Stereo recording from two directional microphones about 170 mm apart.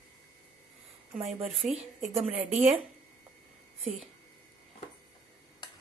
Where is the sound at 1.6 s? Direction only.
5° right (ahead or behind).